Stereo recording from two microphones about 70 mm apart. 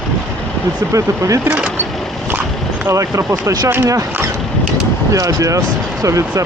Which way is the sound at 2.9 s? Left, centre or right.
Right.